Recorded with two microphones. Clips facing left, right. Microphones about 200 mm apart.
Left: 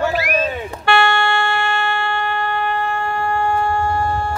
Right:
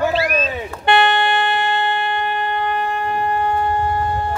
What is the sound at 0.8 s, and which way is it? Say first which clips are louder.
Wind instrument: right 1 dB; 20° right (ahead or behind).